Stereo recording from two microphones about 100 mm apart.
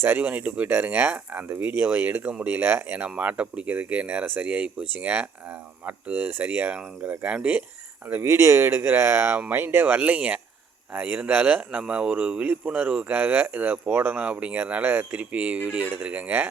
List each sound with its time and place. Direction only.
0.0 s speech: 20° right (ahead or behind)
8.0 s speech: 25° right (ahead or behind)